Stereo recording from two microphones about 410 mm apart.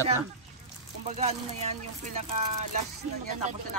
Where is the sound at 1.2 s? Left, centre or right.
Centre.